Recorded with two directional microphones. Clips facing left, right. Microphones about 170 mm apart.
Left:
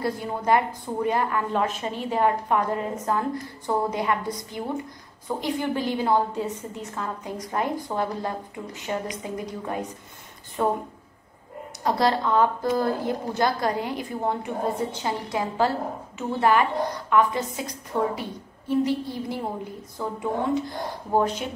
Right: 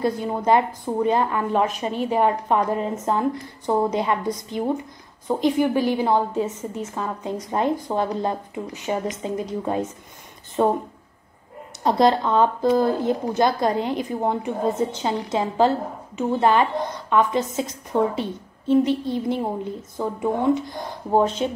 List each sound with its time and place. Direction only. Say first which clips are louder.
0.0 s a woman's voice: right 4 dB; 20° right (ahead or behind)
11.8 s a woman's voice: right 4 dB; 20° right (ahead or behind)